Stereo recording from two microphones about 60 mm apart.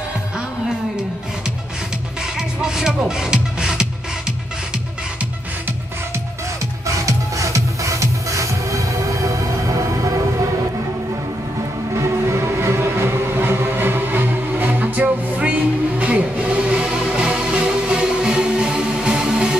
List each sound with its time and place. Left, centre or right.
2.3 s music: centre
7.1 s music: right
11.9 s music: right; by 19.6 s centre